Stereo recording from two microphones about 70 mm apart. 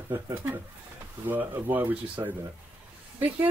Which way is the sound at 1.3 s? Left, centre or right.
Right.